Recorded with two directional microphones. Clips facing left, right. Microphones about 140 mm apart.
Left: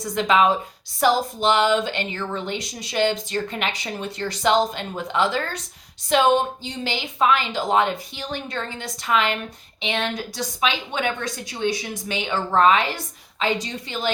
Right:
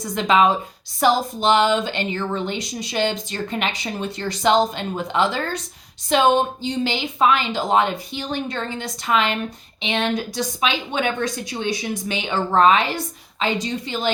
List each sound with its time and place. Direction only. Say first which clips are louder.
0.2 s speech: right 1 dB; 25° right (ahead or behind)